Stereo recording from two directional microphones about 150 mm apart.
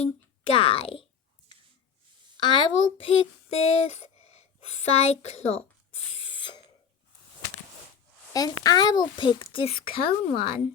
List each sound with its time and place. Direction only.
0.0 s speech: 40° left (ahead or behind)
2.4 s a child's voice: 30° left (ahead or behind)
5.9 s a sound: 40° left (ahead or behind)
8.3 s a child's voice: 25° left (ahead or behind)